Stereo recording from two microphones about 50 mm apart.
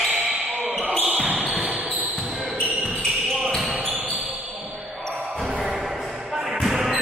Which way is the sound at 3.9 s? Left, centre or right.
Right.